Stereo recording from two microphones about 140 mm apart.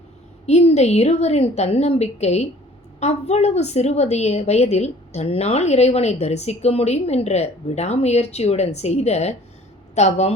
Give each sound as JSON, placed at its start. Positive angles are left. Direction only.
{"t": 0.4, "sound": "a woman's voice", "side_deg": 50}